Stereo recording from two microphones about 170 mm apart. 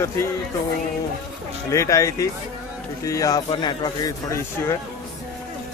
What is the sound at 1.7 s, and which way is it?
Speech, 20° left (ahead or behind).